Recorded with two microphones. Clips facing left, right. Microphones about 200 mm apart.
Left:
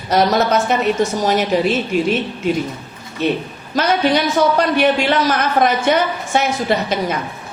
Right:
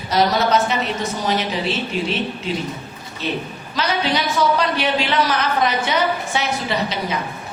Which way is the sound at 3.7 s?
50° left (ahead or behind).